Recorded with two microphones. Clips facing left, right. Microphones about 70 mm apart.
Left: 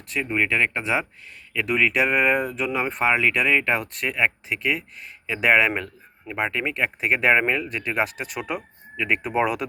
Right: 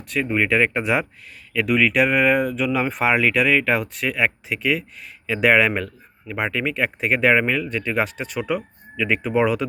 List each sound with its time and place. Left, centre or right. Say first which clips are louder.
0.1 s speech: right 3 dB; centre
0.5 s speech: right 4 dB; centre
2.6 s speech: right 3 dB; centre
2.9 s speech: even; centre
5.7 s a man's voice: right 3 dB; centre
6.7 s speech: right 1 dB; centre
7.7 s speech: right 2 dB; centre